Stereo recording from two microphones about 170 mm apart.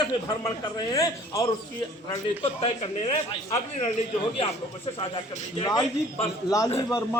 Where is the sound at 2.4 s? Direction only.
35° left (ahead or behind).